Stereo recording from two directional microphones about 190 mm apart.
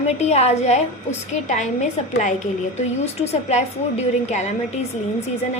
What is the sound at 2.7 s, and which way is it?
A woman's voice, 35° left (ahead or behind).